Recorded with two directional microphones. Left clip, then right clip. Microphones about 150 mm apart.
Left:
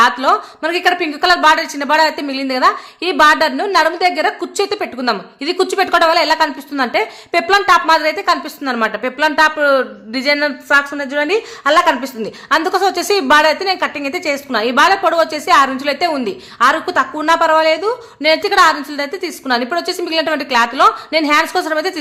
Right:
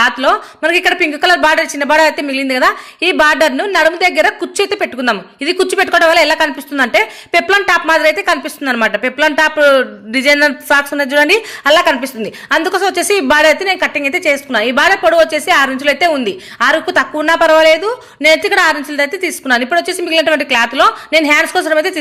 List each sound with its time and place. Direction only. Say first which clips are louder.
0.0 s speech: even; 10° right (ahead or behind)
10.7 s speech: right 2 dB; 30° right (ahead or behind); by 21.9 s 10° right (ahead or behind)